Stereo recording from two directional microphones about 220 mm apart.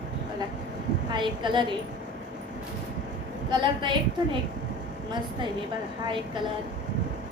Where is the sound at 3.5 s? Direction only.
20° right (ahead or behind).